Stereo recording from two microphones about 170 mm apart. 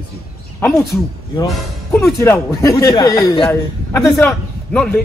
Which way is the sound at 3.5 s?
15° left (ahead or behind).